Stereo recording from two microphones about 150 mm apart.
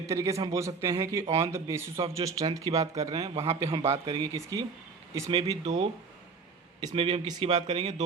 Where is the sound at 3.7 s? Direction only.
40° right (ahead or behind).